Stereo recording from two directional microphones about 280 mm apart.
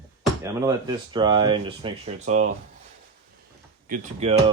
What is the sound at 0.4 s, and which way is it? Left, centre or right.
Speech, centre.